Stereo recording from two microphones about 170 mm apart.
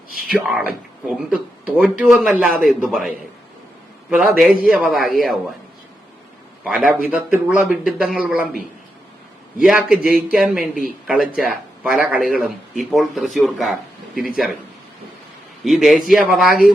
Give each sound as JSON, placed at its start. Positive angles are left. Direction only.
{"t": 0.3, "sound": "speech", "side_deg": -5}
{"t": 4.1, "sound": "speech", "side_deg": -5}
{"t": 6.7, "sound": "a man's voice", "side_deg": -5}
{"t": 9.6, "sound": "a man's voice", "side_deg": -5}
{"t": 15.6, "sound": "speech", "side_deg": 0}